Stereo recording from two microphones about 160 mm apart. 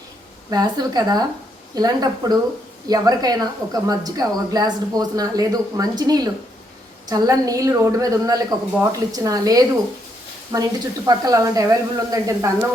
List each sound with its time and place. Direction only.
0.5 s speech: 25° right (ahead or behind)